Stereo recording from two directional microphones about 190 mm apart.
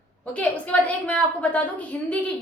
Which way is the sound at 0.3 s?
5° left (ahead or behind).